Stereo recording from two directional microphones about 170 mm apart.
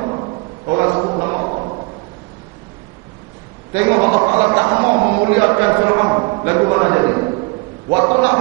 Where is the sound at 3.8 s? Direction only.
25° right (ahead or behind).